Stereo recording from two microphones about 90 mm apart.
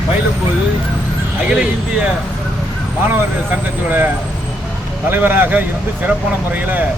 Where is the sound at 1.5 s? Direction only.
15° right (ahead or behind).